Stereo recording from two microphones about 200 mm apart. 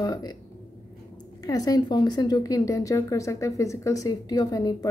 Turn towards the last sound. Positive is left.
turn(degrees=20)  # may be behind; listen again after turning